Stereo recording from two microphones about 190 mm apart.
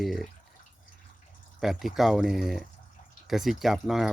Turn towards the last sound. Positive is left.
turn(degrees=0)  # may be behind; listen again after turning